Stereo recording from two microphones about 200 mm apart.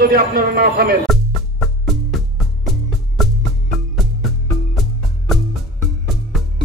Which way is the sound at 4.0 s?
Centre (ahead or behind).